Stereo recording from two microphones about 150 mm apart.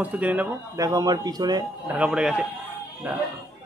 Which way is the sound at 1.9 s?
5° right (ahead or behind).